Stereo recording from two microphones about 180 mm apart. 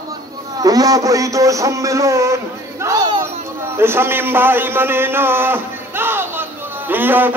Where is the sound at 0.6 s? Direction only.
20° right (ahead or behind).